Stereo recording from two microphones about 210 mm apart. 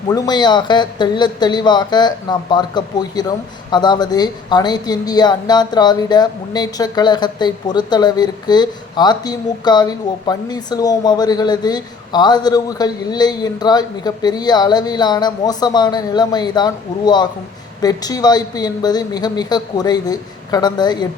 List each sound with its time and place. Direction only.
0.1 s speech: 20° left (ahead or behind)